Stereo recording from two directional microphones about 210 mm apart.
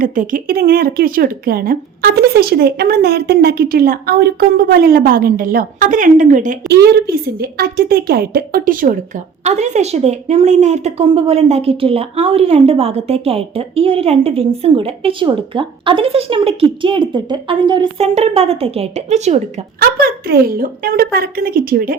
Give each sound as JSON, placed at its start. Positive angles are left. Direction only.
{"t": 0.0, "sound": "a woman's voice", "side_deg": -40}
{"t": 19.8, "sound": "speech", "side_deg": -45}